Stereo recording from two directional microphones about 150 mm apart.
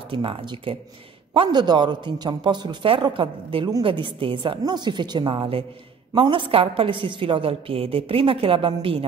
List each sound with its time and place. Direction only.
0.1 s a woman's voice: 35° right (ahead or behind)